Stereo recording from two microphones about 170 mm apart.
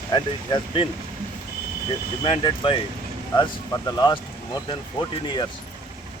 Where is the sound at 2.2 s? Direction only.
30° left (ahead or behind).